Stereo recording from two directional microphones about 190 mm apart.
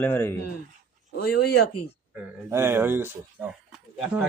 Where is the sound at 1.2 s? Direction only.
55° left (ahead or behind).